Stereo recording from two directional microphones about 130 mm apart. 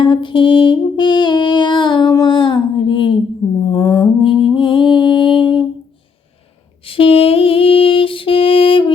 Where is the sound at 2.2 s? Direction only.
40° left (ahead or behind).